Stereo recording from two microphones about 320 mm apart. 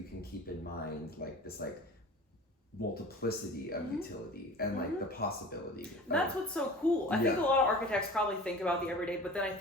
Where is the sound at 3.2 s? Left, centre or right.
Left.